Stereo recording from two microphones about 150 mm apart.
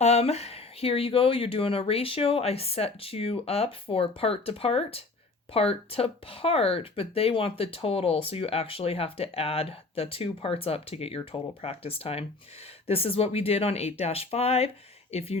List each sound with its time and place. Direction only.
0.0 s speech: 45° left (ahead or behind)